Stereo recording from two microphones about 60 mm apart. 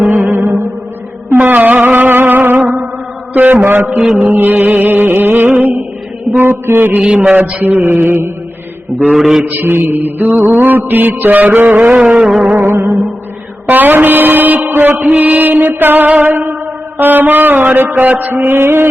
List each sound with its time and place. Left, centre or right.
0.1 s music: right
3.3 s mantra: right
3.8 s a sound: centre
4.3 s mantra: right
6.3 s a sound: right
6.7 s mantra: right
9.1 s mantra: centre
9.4 s mantra: right; by 12.3 s centre
12.3 s a sound: centre
12.5 s music: right
13.7 s mantra: right
18.3 s mantra: right